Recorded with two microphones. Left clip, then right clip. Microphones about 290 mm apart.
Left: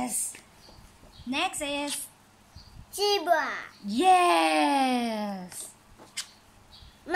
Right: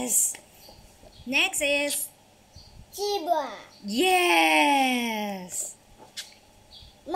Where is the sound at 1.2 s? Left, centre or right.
Left.